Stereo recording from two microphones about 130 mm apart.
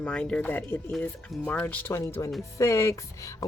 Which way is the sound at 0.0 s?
10° left (ahead or behind).